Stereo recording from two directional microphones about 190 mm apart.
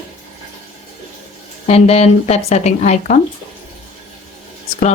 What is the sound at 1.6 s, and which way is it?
Speech, 35° left (ahead or behind).